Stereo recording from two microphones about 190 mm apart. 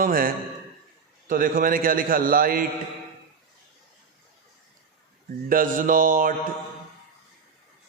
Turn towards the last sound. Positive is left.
turn(degrees=-45)  # may be behind; listen again after turning